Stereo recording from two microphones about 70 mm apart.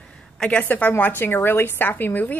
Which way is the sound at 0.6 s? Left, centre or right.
Left.